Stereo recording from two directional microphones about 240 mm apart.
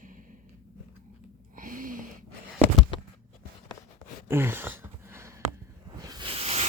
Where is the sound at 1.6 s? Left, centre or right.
Right.